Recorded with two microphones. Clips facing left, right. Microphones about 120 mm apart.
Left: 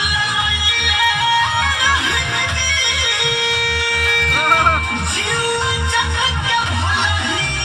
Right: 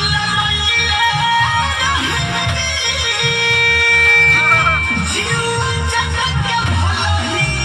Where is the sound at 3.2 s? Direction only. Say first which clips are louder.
Right 2 dB; 60° right (ahead or behind).